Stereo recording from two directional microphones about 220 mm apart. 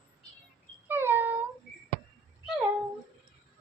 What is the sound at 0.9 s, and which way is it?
Cat, 10° right (ahead or behind).